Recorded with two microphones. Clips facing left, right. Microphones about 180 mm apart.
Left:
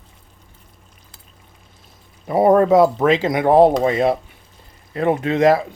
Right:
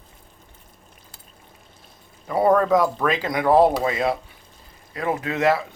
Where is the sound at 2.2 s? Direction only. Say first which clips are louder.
Left 5 dB; 25° left (ahead or behind).